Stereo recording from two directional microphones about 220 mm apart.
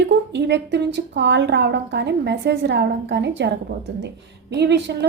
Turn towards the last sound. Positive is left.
turn(degrees=-50)  # may be behind; listen again after turning